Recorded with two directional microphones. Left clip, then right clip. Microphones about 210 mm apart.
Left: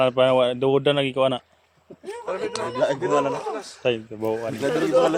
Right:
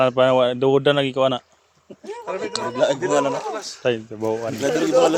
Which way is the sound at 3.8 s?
15° right (ahead or behind).